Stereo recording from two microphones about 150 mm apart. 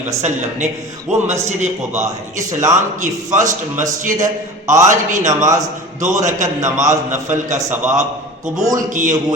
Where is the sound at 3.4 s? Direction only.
20° right (ahead or behind).